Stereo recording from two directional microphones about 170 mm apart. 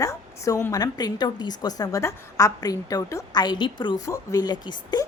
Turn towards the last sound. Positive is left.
turn(degrees=25)  # may be behind; listen again after turning